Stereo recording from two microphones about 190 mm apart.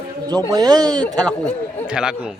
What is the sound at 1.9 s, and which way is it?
Speech, 5° right (ahead or behind).